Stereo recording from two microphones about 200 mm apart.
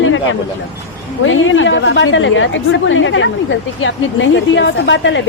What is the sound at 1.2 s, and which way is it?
A woman's voice, 75° left (ahead or behind).